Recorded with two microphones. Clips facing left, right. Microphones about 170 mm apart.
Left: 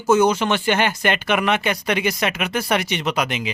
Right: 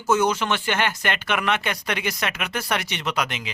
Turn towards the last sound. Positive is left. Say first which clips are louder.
# left 4 dB
turn(degrees=15)  # may be behind; listen again after turning